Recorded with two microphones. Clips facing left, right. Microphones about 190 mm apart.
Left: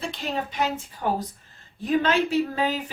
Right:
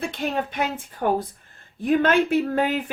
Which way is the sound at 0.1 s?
55° right (ahead or behind).